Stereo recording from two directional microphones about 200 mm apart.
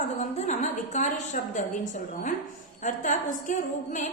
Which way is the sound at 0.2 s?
35° left (ahead or behind).